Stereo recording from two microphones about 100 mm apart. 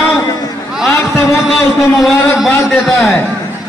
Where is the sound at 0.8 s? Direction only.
25° left (ahead or behind).